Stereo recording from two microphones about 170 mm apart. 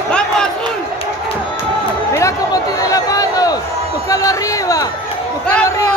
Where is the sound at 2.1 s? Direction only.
20° left (ahead or behind).